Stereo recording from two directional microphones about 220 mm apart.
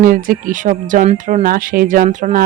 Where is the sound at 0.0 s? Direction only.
40° right (ahead or behind).